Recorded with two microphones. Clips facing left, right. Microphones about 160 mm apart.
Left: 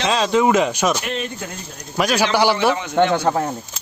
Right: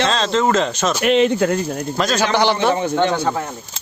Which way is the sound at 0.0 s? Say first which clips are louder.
Left 1 dB; 10° left (ahead or behind).